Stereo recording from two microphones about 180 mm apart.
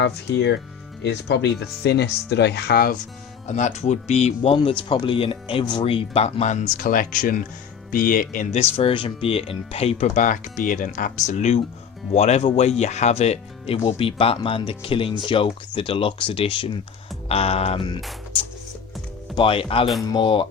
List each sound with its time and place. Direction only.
0.3 s speech: 70° left (ahead or behind)
3.4 s speech: 40° left (ahead or behind)
8.7 s speech: 30° left (ahead or behind)
19.4 s speech: 30° left (ahead or behind)